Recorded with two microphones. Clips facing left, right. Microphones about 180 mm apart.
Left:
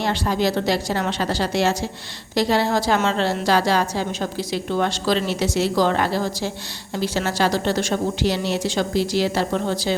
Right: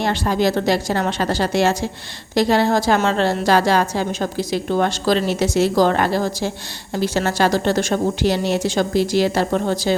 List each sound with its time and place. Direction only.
0.0 s a woman's voice: 50° right (ahead or behind)